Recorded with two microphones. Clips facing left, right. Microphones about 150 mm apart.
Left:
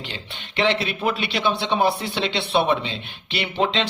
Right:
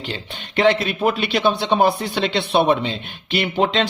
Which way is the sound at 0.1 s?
45° right (ahead or behind).